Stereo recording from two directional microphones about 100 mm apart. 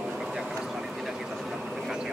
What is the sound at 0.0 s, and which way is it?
Vehicle, 5° right (ahead or behind).